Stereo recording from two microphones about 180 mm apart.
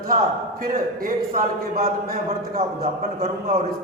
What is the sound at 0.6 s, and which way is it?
A man's voice, 50° right (ahead or behind).